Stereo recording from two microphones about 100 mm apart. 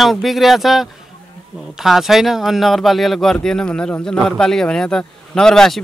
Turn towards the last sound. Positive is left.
turn(degrees=5)  # may be behind; listen again after turning